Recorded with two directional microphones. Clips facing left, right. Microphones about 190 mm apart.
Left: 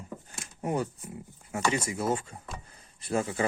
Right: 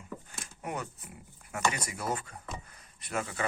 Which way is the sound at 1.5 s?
25° left (ahead or behind).